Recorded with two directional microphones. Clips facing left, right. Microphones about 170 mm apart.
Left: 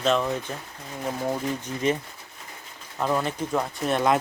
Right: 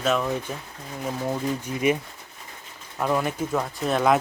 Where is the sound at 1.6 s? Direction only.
10° right (ahead or behind).